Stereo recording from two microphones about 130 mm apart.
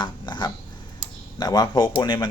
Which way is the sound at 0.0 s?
35° left (ahead or behind).